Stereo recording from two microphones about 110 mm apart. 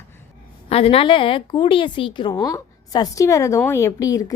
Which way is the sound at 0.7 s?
65° left (ahead or behind).